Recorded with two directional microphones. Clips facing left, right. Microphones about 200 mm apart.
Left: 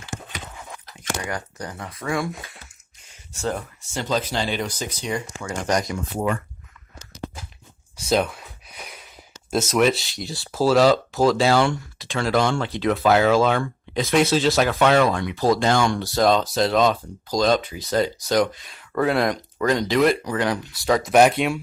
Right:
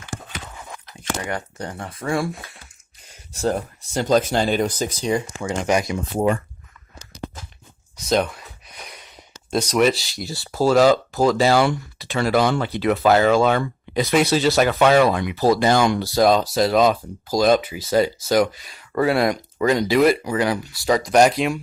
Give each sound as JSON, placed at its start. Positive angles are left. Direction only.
{"t": 1.3, "sound": "speech", "side_deg": -25}
{"t": 3.4, "sound": "speech", "side_deg": -40}
{"t": 5.6, "sound": "speech", "side_deg": -10}
{"t": 6.1, "sound": "speech", "side_deg": -30}
{"t": 8.1, "sound": "speech", "side_deg": 5}